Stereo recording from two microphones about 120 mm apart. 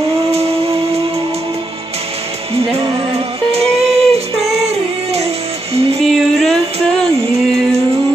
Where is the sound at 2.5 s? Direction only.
55° right (ahead or behind).